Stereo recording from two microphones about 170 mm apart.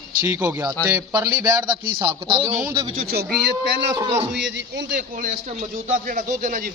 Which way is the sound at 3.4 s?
85° right.